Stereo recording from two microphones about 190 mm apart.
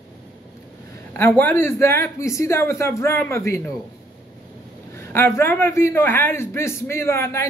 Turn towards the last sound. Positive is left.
turn(degrees=15)  # may be behind; listen again after turning